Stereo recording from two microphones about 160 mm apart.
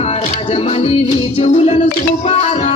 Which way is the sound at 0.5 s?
40° left (ahead or behind).